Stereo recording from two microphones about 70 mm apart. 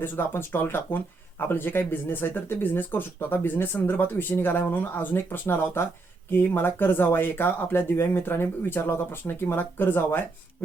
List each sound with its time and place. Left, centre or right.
0.0 s speech: left